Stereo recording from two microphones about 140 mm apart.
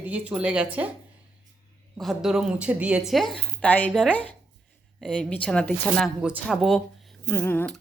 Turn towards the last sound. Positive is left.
turn(degrees=15)  # may be behind; listen again after turning